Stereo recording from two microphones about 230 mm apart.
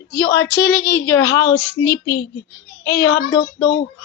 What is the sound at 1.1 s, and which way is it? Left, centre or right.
Speech, centre.